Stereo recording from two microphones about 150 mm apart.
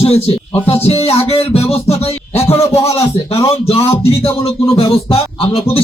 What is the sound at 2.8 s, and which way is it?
Speech, 20° left (ahead or behind).